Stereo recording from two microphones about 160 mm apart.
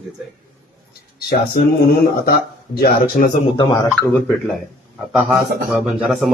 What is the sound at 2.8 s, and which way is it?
Speech, 70° left (ahead or behind).